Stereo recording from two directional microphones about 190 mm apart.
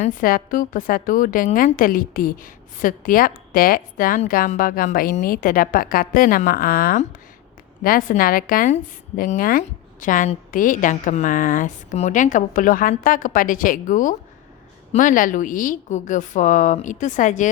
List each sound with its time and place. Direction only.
0.0 s a woman's voice: 45° left (ahead or behind)